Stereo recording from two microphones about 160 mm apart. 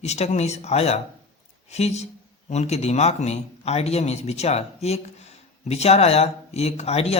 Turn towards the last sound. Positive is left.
turn(degrees=40)  # may be behind; listen again after turning